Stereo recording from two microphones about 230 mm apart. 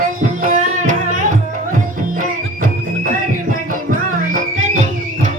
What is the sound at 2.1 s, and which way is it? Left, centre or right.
Music, right.